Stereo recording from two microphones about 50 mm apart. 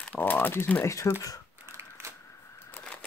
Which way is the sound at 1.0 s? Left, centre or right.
Left.